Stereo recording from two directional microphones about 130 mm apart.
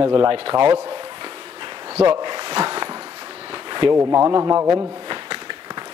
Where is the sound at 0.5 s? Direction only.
35° right (ahead or behind).